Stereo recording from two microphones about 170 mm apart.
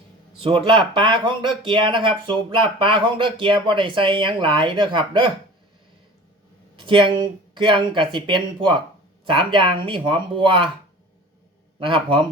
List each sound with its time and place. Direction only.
0.4 s speech: 30° right (ahead or behind)
6.7 s speech: 30° right (ahead or behind)
11.8 s speech: 30° right (ahead or behind)